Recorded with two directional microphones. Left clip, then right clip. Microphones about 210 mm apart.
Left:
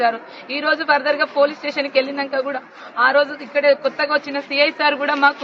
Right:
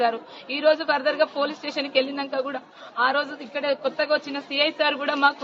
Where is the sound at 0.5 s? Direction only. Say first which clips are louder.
Left 3 dB; 25° right (ahead or behind).